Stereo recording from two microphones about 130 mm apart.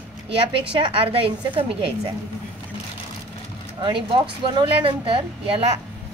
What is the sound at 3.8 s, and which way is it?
A woman's voice, 40° right (ahead or behind).